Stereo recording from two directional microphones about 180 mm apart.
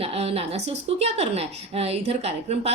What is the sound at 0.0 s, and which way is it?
A woman's voice, 35° right (ahead or behind).